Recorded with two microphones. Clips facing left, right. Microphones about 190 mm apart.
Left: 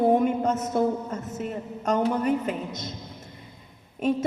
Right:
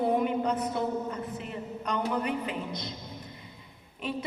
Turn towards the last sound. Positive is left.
turn(degrees=45)  # may be behind; listen again after turning